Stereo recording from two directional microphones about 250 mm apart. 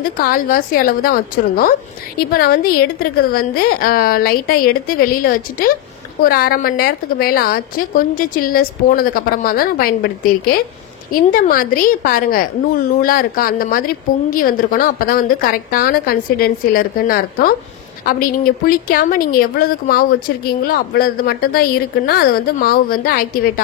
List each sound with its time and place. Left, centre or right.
0.0 s a woman's voice: left